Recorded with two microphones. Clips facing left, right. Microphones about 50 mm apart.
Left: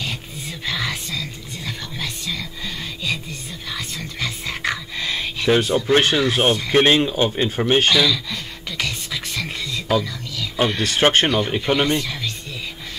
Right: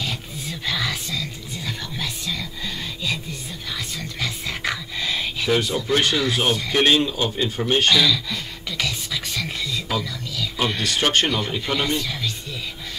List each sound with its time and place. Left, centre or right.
0.5 s a sound: centre
3.7 s whispering: centre
5.5 s speech: left
7.9 s a sound: centre
10.8 s speech: left
11.2 s speech: centre
12.0 s speech: centre